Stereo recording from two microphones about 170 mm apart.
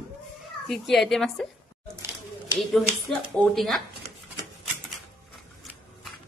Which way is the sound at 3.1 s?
Centre (ahead or behind).